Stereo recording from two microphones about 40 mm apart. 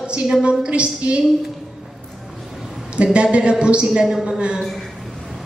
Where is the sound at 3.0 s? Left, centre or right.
Right.